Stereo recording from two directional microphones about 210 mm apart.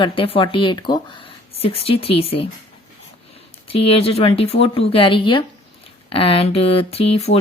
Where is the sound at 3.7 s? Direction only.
25° left (ahead or behind).